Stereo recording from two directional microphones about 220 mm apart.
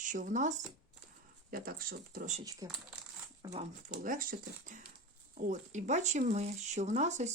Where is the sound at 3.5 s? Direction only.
35° right (ahead or behind).